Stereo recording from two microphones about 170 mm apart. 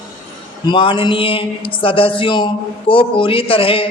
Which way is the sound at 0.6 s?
30° left (ahead or behind).